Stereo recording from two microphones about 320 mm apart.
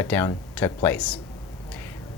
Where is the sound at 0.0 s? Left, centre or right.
Centre.